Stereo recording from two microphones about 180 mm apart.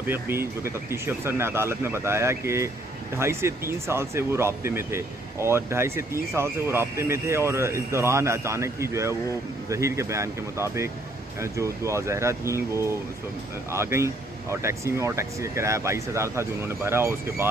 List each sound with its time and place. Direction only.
0.0 s speech: 10° right (ahead or behind)